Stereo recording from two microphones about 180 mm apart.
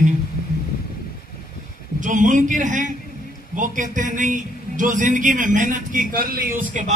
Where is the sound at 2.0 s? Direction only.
45° right (ahead or behind).